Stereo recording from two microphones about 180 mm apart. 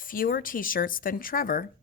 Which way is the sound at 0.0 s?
50° left (ahead or behind).